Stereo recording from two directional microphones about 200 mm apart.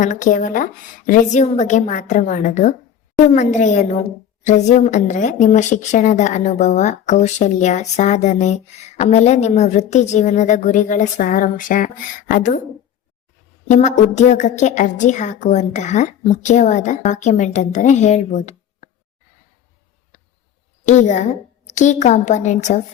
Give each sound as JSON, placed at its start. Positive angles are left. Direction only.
{"t": 0.0, "sound": "a woman's voice", "side_deg": 40}
{"t": 13.7, "sound": "a woman's voice", "side_deg": 35}
{"t": 20.8, "sound": "a woman's voice", "side_deg": 35}